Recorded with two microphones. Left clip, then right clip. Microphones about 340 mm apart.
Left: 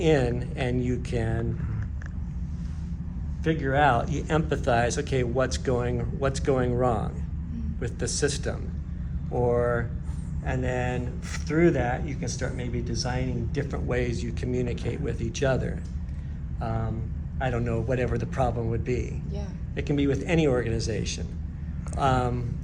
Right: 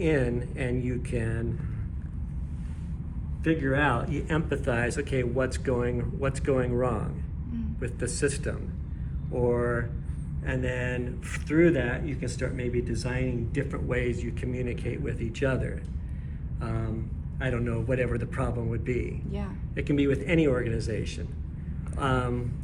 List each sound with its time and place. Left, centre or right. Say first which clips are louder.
0.0 s speech: left 3 dB; left
3.4 s speech: left 3 dB; left